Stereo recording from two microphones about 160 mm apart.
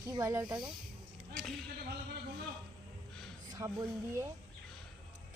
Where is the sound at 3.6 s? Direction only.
20° right (ahead or behind).